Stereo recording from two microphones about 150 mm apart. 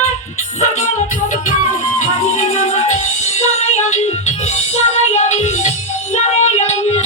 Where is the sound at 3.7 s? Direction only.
50° left (ahead or behind).